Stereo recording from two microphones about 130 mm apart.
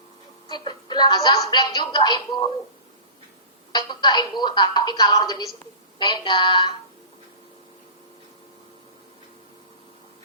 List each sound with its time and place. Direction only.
0.4 s a woman's voice: 35° left (ahead or behind)
3.7 s a woman's voice: 30° left (ahead or behind)